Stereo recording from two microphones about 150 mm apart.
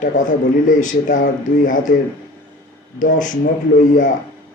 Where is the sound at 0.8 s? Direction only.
60° left (ahead or behind).